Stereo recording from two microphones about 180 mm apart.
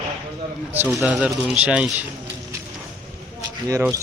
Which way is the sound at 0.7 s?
10° right (ahead or behind).